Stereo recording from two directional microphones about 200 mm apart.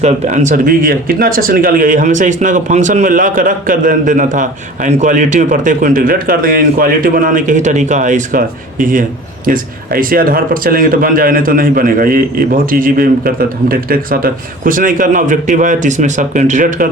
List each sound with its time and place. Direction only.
0.0 s speech: 35° right (ahead or behind)